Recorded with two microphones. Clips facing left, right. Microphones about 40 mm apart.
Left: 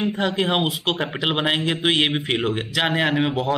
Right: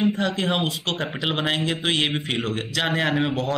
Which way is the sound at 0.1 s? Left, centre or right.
Centre.